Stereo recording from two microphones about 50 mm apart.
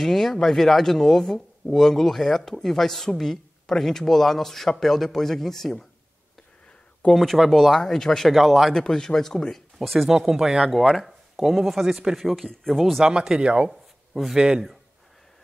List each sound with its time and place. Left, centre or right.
0.0 s speech: centre
7.2 s speech: centre
8.3 s speech: centre
8.7 s speech: centre
9.8 s speech: centre
12.3 s speech: centre
13.0 s speech: centre
13.7 s a sound: centre
14.3 s speech: centre